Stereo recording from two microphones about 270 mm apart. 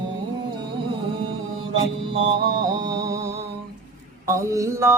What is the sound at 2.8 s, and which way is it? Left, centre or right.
Music, centre.